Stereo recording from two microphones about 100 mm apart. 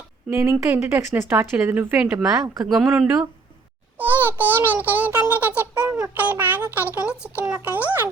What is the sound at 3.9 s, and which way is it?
A child's voice, 20° right (ahead or behind).